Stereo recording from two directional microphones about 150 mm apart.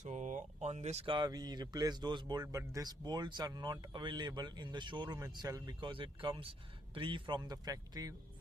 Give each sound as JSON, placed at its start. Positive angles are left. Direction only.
{"t": 0.0, "sound": "speech", "side_deg": -55}
{"t": 1.1, "sound": "speech", "side_deg": -30}